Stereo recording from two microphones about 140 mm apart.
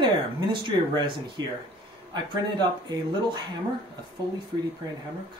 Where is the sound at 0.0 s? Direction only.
35° right (ahead or behind).